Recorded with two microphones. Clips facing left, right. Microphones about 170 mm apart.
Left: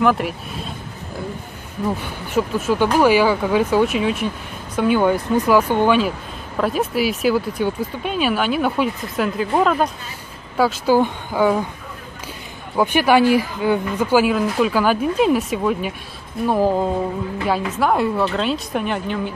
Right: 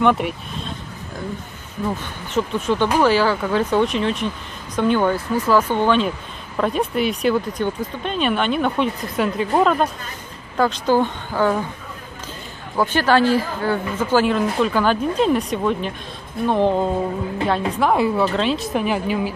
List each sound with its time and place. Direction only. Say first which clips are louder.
0.0 s speech: even; centre (ahead or behind)
2.0 s speech: left 2 dB; 10° left (ahead or behind)
12.7 s speech: left 2 dB; 15° left (ahead or behind); by 19.3 s 5° right (ahead or behind)